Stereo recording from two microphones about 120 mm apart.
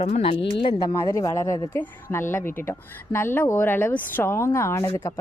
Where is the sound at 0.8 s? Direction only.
30° left (ahead or behind).